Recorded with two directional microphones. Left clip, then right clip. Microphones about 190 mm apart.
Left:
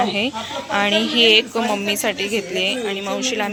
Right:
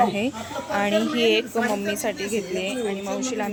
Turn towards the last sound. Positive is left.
turn(degrees=0)  # may be behind; listen again after turning